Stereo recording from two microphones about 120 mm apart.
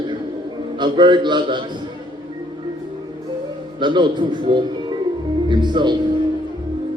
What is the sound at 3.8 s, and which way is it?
A man's voice, 40° right (ahead or behind).